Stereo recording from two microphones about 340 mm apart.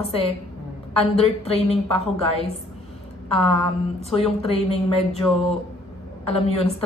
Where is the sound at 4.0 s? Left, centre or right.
Centre.